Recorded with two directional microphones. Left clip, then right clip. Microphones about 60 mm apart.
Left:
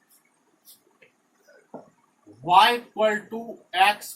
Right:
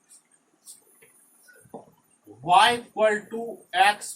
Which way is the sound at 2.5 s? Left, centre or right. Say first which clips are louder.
Left 1 dB; right.